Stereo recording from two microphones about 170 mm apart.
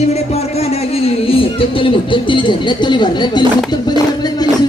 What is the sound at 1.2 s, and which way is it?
Speech, 30° left (ahead or behind).